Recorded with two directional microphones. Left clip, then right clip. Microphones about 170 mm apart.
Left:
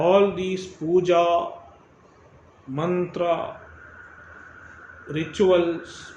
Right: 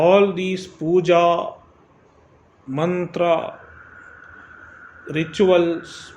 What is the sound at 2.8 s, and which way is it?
Speech, 50° right (ahead or behind).